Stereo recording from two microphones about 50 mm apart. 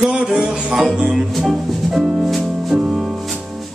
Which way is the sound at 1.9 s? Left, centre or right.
Centre.